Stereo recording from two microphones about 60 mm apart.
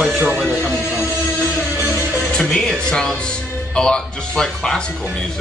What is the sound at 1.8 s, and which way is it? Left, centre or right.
Music, right.